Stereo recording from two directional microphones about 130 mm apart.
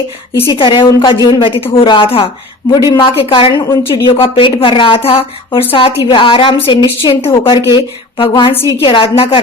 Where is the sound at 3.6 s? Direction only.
20° left (ahead or behind).